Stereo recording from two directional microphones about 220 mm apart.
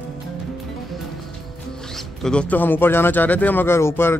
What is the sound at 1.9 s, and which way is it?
Speech, centre (ahead or behind).